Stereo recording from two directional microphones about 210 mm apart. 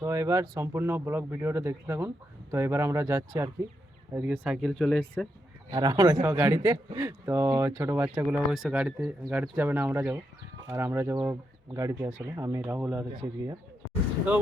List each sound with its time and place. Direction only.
0.0 s speech: 15° right (ahead or behind); by 5.3 s 5° left (ahead or behind)
5.7 s speech: 20° right (ahead or behind)